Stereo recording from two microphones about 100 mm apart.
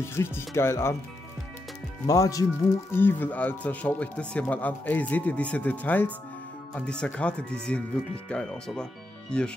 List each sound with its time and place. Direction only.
0.1 s speech: 25° left (ahead or behind)
2.0 s speech: 35° left (ahead or behind)
2.9 s speech: 20° left (ahead or behind)